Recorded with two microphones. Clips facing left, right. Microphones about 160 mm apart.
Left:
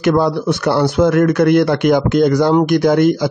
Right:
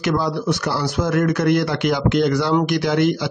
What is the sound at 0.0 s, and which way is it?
Speech, 55° left (ahead or behind).